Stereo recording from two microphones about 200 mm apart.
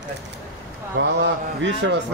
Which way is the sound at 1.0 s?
65° right (ahead or behind).